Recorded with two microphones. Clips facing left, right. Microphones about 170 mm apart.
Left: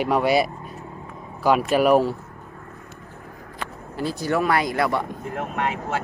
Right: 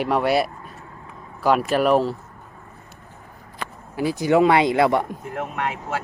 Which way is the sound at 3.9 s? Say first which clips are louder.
Right 5 dB; 15° right (ahead or behind).